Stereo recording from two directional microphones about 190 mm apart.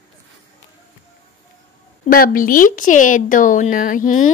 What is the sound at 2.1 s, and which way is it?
Speech, 50° left (ahead or behind).